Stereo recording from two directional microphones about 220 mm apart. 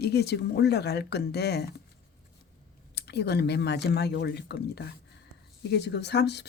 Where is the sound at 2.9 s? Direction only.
50° left (ahead or behind).